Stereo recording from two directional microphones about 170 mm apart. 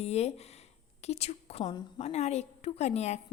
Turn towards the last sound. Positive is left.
turn(degrees=40)  # may be behind; listen again after turning